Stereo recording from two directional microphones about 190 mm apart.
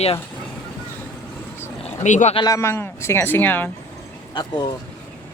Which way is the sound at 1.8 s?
40° left (ahead or behind).